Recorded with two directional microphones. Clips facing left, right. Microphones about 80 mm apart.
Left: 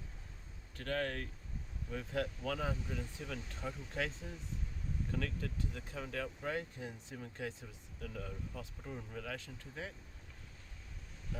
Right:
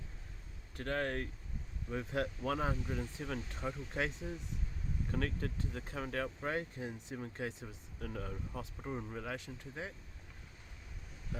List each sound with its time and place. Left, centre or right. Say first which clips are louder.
0.8 s speech: right 2 dB; right
5.1 s speech: right 4 dB; right
8.0 s speech: right 2 dB; right